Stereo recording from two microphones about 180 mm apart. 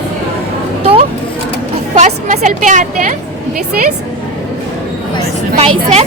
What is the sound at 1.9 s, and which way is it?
A woman's voice, 40° right (ahead or behind).